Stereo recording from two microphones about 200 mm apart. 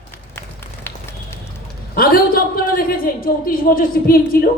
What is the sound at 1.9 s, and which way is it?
A man's voice, 45° left (ahead or behind).